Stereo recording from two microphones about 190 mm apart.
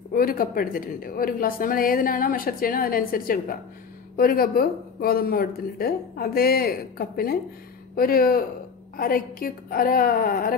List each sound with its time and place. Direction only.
0.1 s a woman's voice: 50° left (ahead or behind)